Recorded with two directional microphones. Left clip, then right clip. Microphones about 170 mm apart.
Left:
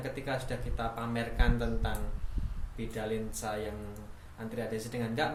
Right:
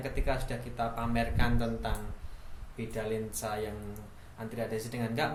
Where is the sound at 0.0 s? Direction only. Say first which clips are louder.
Right 1 dB; 20° right (ahead or behind).